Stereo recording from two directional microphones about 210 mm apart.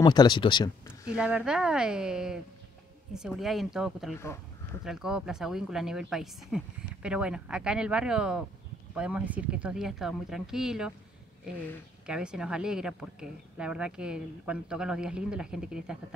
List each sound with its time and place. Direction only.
0.0 s speech: 20° left (ahead or behind)
1.1 s a woman's voice: 5° right (ahead or behind)
12.1 s a woman's voice: 5° right (ahead or behind)